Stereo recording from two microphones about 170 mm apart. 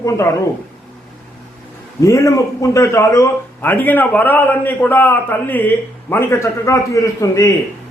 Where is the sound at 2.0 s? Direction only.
20° left (ahead or behind).